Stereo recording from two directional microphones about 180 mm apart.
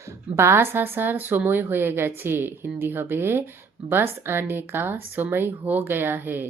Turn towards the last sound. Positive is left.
turn(degrees=-10)  # may be behind; listen again after turning